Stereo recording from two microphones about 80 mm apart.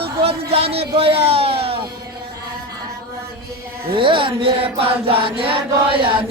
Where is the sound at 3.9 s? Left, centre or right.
Right.